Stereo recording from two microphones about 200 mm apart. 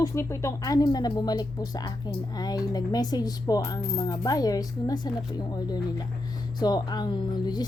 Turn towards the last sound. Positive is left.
turn(degrees=20)  # may be behind; listen again after turning